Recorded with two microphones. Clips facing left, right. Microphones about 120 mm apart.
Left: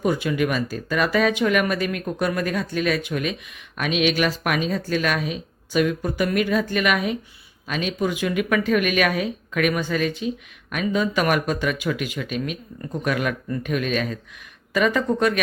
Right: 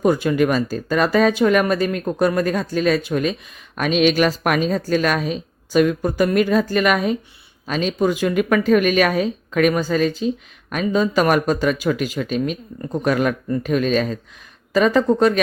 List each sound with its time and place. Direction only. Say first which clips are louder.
0.0 s speech: right 5 dB; 40° right (ahead or behind)